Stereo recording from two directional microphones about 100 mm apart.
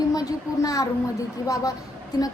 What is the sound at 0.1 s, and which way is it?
Speech, 35° left (ahead or behind).